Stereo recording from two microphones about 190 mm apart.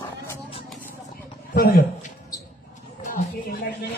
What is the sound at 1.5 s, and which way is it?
Speech, 55° left (ahead or behind).